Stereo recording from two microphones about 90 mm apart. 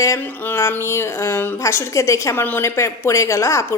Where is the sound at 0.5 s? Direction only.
30° left (ahead or behind).